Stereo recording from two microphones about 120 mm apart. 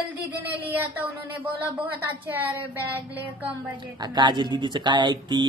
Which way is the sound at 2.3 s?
15° right (ahead or behind).